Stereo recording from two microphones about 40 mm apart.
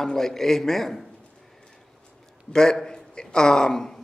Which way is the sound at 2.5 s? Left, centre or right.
Centre.